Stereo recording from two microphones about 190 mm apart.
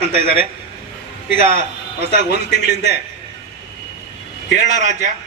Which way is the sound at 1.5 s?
35° right (ahead or behind).